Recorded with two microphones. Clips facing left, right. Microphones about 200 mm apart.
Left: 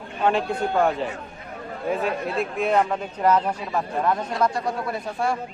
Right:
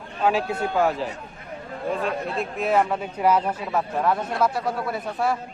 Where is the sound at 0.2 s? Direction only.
5° right (ahead or behind).